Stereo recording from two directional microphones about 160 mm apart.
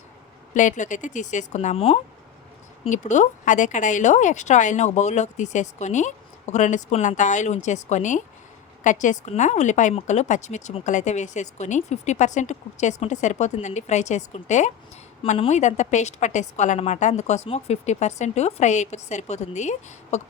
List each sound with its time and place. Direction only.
0.5 s speech: 50° left (ahead or behind)
2.8 s speech: 50° left (ahead or behind)